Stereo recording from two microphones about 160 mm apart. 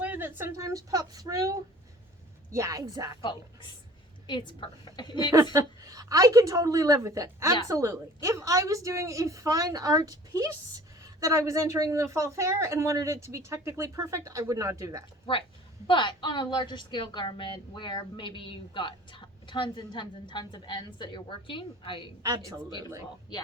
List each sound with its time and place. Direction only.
0.0 s a woman's voice: 10° right (ahead or behind)
3.2 s a woman's voice: 30° left (ahead or behind)
5.5 s a woman's voice: 20° right (ahead or behind)
15.3 s a woman's voice: 35° left (ahead or behind)
22.4 s a woman's voice: 20° right (ahead or behind)